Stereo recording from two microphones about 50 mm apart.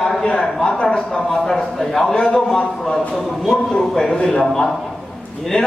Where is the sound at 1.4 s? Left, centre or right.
Centre.